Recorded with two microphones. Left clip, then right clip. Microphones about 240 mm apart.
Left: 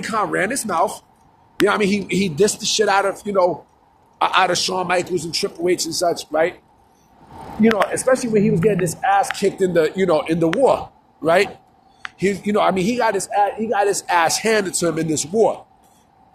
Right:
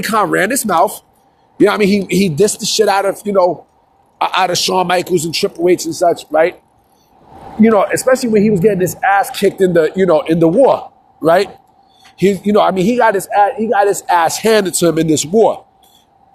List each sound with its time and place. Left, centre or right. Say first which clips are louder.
0.0 s a man's voice: right 7 dB; right
7.6 s a man's voice: right 6 dB; right